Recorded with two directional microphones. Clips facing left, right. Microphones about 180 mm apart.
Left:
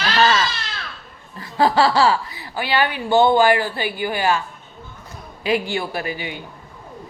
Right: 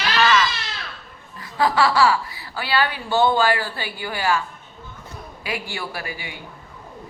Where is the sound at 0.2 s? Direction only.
30° left (ahead or behind).